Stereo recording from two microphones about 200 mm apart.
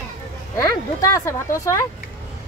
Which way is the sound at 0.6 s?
15° left (ahead or behind).